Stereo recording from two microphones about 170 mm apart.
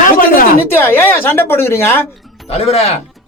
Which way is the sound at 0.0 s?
55° left (ahead or behind).